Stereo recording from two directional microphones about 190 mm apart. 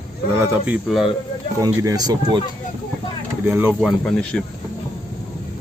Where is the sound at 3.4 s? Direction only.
10° right (ahead or behind).